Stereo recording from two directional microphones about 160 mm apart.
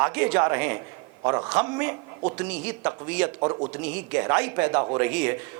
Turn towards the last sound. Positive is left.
turn(degrees=-10)  # may be behind; listen again after turning